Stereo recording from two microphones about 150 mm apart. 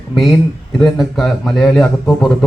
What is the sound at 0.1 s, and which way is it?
Speech, centre (ahead or behind).